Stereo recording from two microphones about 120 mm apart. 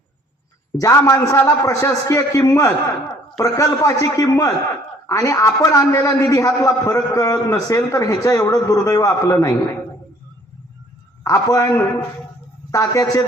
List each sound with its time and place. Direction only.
0.8 s a man's voice: 25° left (ahead or behind)
11.2 s a man's voice: 25° left (ahead or behind)